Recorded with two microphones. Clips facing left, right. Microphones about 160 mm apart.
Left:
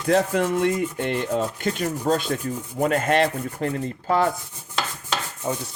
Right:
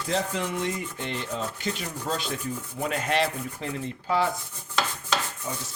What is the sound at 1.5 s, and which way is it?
Speech, 50° left (ahead or behind).